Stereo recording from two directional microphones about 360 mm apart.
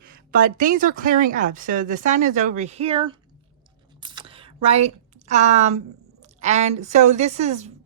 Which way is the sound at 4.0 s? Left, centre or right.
Centre.